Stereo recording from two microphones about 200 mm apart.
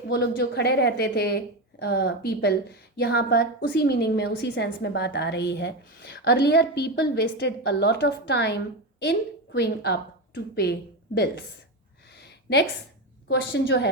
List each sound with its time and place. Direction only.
0.1 s a woman's voice: 55° left (ahead or behind)
12.1 s a sound: 55° left (ahead or behind)
13.2 s a woman's voice: 60° left (ahead or behind)